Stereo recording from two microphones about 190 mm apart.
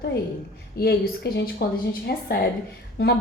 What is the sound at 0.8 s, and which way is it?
A woman's voice, 55° left (ahead or behind).